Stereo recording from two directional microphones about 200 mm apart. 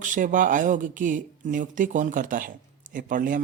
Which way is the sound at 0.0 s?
40° right (ahead or behind).